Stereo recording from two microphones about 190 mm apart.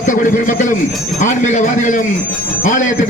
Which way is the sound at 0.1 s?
45° left (ahead or behind).